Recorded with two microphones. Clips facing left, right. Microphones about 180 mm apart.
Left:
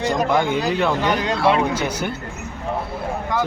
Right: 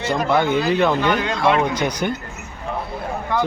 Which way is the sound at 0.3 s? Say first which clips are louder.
Right 1 dB; 10° left (ahead or behind).